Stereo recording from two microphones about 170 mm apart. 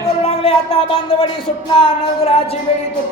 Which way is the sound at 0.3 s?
35° left (ahead or behind).